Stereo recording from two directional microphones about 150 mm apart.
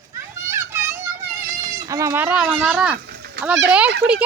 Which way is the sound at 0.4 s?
20° right (ahead or behind).